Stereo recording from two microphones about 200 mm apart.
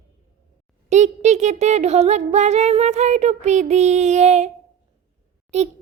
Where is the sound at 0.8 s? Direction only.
35° right (ahead or behind).